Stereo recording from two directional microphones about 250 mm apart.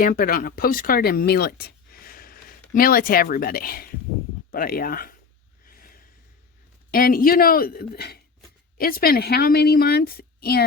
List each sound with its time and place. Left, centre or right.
0.0 s a woman's voice: left
5.6 s a sound: left
6.9 s a woman's voice: left